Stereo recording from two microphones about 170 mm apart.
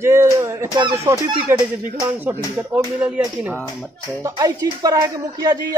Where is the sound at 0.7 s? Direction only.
20° right (ahead or behind).